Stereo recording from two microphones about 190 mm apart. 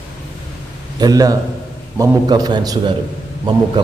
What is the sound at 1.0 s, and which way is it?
A man's voice, 20° right (ahead or behind).